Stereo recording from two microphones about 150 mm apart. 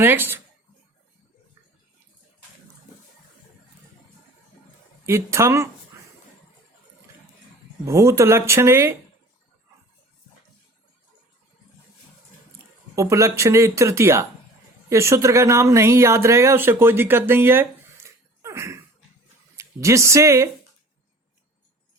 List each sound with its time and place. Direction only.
0.0 s speech: 15° right (ahead or behind)
5.0 s speech: 20° right (ahead or behind)
7.9 s speech: 20° right (ahead or behind)
13.0 s speech: 20° right (ahead or behind)